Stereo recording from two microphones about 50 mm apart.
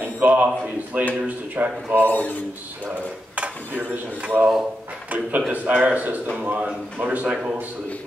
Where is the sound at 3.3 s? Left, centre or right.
Right.